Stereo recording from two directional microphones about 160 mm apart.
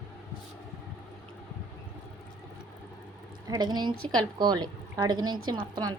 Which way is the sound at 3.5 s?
25° right (ahead or behind).